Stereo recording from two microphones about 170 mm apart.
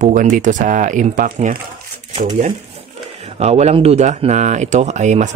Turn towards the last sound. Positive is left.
turn(degrees=-45)  # may be behind; listen again after turning